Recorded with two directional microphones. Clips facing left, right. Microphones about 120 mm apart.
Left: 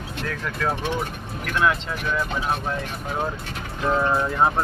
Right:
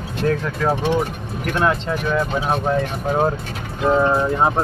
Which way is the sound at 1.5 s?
35° right (ahead or behind).